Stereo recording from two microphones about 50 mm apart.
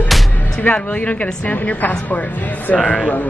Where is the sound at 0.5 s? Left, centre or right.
Left.